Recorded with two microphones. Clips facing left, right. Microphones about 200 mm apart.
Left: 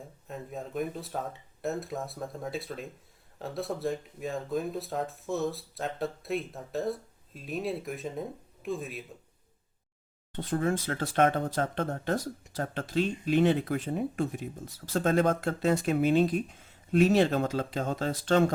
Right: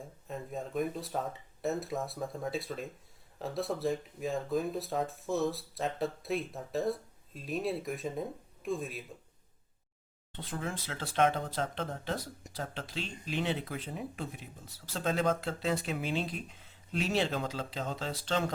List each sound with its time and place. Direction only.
0.3 s speech: centre (ahead or behind)
10.3 s speech: 50° left (ahead or behind)